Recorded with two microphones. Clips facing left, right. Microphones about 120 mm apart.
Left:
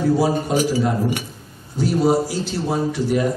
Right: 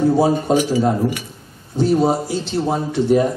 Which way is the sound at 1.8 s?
25° right (ahead or behind).